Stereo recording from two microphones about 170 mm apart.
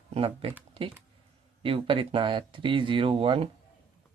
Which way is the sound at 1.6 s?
30° right (ahead or behind).